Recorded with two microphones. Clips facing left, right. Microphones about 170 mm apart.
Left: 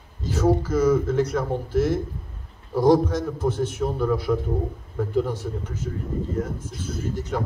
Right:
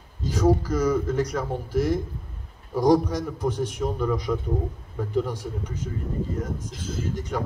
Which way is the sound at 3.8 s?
5° left (ahead or behind).